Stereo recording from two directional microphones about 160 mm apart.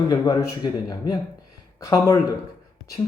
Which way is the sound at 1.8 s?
20° left (ahead or behind).